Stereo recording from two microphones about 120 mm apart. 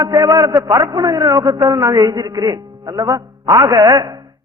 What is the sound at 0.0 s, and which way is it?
A man's voice, 30° right (ahead or behind).